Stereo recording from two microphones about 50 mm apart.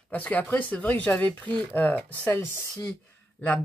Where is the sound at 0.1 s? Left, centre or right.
Left.